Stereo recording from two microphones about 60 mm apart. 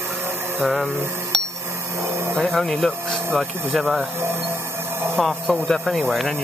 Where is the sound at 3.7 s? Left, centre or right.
Centre.